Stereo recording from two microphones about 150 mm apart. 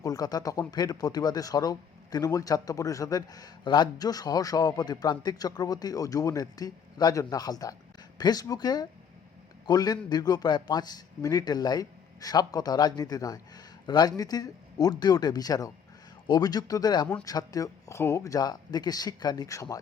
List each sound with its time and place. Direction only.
0.0 s a man's voice: 25° left (ahead or behind)